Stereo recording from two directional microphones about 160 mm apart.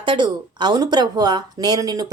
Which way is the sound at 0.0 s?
30° right (ahead or behind).